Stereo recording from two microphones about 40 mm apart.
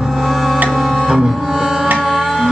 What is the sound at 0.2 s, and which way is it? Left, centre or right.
Music, centre.